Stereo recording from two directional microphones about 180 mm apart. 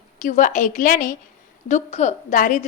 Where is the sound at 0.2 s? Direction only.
45° left (ahead or behind).